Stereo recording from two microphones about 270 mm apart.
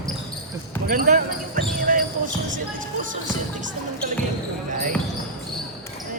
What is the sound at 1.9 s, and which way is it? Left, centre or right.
Basketball bounce, right.